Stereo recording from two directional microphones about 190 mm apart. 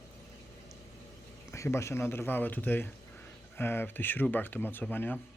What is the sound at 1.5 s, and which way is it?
Speech, 15° left (ahead or behind).